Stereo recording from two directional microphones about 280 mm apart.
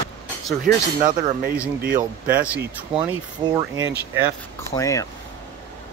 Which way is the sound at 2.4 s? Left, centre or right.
Centre.